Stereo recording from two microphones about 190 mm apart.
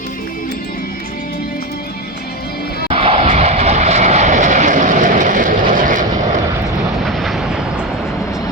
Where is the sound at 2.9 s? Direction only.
30° right (ahead or behind).